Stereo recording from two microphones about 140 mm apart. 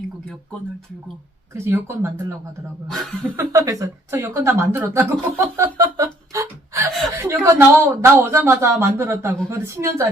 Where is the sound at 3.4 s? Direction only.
25° right (ahead or behind).